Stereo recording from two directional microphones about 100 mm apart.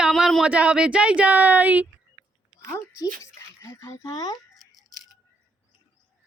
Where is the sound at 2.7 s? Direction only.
25° left (ahead or behind).